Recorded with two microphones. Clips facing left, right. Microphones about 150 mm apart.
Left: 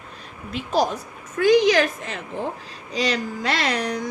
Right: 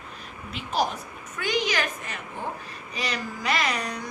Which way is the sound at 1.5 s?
90° left.